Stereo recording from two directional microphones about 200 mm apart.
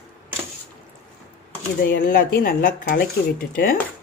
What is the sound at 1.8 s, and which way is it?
Speech, 45° left (ahead or behind).